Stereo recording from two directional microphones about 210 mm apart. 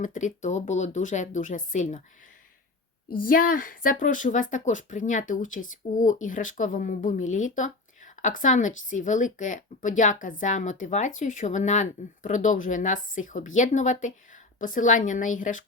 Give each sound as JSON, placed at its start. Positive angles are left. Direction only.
{"t": 0.0, "sound": "a woman's voice", "side_deg": 35}
{"t": 3.2, "sound": "a woman's voice", "side_deg": 40}